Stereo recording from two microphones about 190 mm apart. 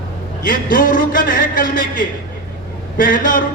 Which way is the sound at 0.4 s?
45° left (ahead or behind).